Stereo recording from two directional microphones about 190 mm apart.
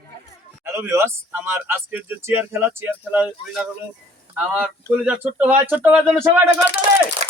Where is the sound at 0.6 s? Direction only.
10° right (ahead or behind).